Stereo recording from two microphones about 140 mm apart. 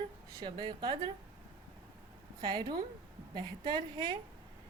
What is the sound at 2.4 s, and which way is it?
A woman's voice, 35° right (ahead or behind).